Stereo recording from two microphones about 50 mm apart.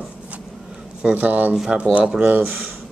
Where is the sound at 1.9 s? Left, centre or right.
Right.